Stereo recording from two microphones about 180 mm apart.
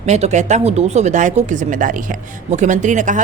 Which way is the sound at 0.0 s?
40° right (ahead or behind).